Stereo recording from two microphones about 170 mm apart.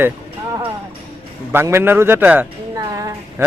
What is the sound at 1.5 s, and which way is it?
Speech, 15° right (ahead or behind).